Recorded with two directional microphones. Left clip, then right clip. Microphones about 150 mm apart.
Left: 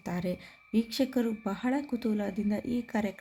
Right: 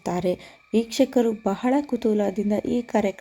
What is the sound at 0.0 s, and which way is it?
Speech, 35° right (ahead or behind).